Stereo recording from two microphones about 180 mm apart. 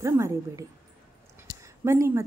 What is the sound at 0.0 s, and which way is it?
A woman's voice, 15° right (ahead or behind).